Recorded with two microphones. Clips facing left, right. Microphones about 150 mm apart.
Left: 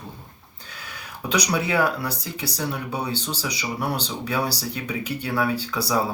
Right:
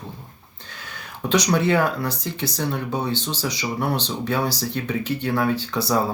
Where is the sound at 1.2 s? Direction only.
10° left (ahead or behind).